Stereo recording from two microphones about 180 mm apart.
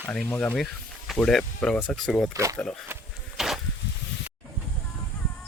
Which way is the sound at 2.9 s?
Centre (ahead or behind).